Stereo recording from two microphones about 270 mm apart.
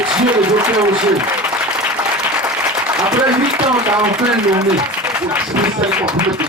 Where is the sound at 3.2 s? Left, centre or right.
Centre.